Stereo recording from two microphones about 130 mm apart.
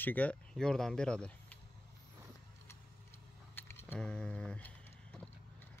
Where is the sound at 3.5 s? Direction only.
15° left (ahead or behind).